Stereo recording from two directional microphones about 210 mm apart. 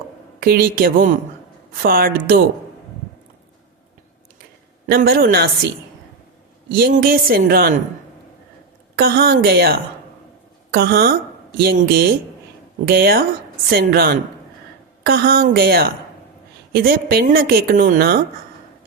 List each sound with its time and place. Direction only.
0.3 s a woman's voice: 45° right (ahead or behind)
4.9 s a woman's voice: 45° right (ahead or behind)
6.7 s a woman's voice: 45° right (ahead or behind)
9.0 s a woman's voice: 45° right (ahead or behind)